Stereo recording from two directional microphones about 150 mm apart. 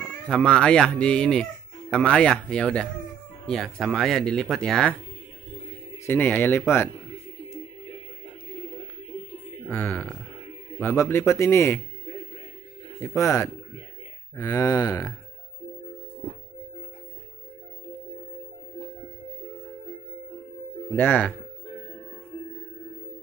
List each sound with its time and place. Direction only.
0.3 s speech: 5° left (ahead or behind)
6.0 s a man's voice: 10° left (ahead or behind)
9.7 s a man's voice: 15° left (ahead or behind)
13.0 s speech: 20° left (ahead or behind)
20.9 s a man's voice: 10° left (ahead or behind)